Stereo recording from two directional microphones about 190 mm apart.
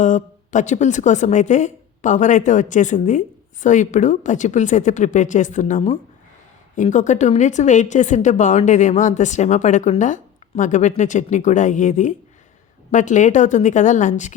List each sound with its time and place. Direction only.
0.0 s a woman's voice: 40° left (ahead or behind)